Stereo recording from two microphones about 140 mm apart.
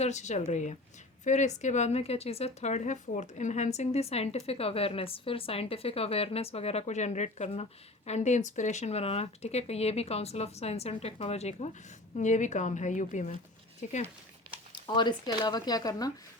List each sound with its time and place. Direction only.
0.0 s a woman's voice: 55° left (ahead or behind)
14.7 s speech: 35° left (ahead or behind)